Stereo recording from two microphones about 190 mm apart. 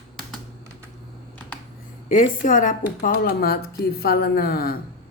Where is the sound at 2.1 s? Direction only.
45° left (ahead or behind).